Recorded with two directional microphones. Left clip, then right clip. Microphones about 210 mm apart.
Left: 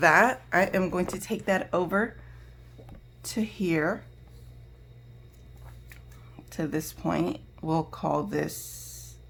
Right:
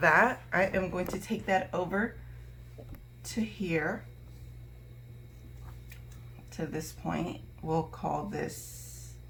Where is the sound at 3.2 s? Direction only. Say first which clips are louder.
Left 5 dB; 60° left (ahead or behind).